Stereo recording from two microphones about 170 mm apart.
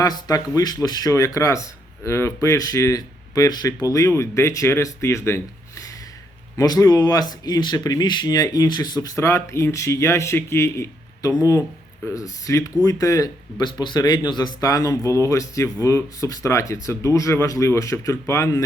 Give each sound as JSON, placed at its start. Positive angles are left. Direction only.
{"t": 0.0, "sound": "speech", "side_deg": 20}